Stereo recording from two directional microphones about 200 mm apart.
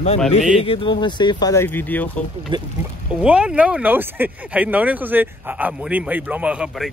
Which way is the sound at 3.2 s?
5° right (ahead or behind).